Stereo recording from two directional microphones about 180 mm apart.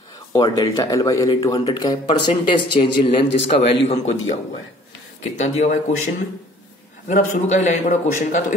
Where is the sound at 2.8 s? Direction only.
35° left (ahead or behind).